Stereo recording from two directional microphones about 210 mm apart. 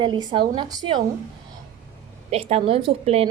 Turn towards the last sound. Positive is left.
turn(degrees=-30)  # may be behind; listen again after turning